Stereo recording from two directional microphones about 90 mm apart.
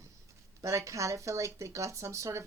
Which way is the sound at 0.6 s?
35° right (ahead or behind).